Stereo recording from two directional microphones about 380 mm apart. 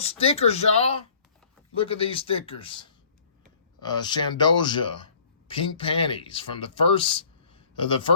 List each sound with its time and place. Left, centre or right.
0.0 s speech: centre